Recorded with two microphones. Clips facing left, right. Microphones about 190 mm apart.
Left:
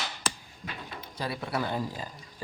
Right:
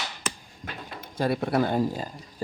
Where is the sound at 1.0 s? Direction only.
50° right (ahead or behind).